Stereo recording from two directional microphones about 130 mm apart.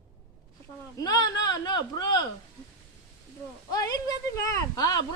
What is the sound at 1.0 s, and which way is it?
Speech, 30° left (ahead or behind).